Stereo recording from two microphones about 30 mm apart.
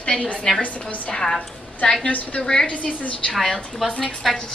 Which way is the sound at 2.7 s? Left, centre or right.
Left.